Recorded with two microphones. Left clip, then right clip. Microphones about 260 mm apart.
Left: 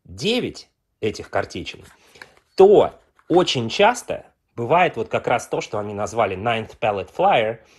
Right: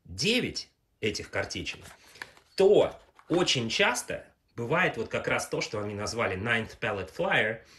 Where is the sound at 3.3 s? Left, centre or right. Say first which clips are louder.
Left 8 dB; centre.